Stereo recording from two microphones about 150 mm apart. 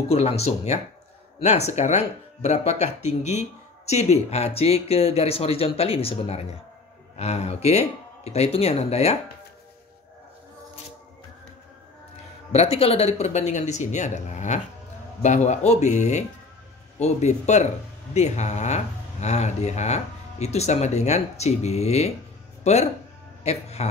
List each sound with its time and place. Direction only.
0.1 s speech: 45° left (ahead or behind)
12.5 s speech: 40° left (ahead or behind)